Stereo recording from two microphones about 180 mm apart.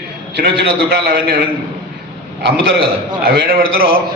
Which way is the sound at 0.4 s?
65° right (ahead or behind).